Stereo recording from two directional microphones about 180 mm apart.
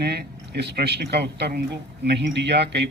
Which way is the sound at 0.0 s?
65° right (ahead or behind).